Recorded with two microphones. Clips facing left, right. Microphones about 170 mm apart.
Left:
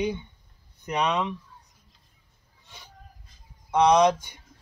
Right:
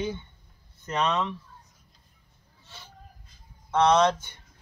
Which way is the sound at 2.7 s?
15° left (ahead or behind).